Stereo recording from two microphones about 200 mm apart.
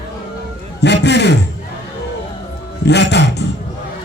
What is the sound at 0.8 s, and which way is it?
Speech, 60° left (ahead or behind).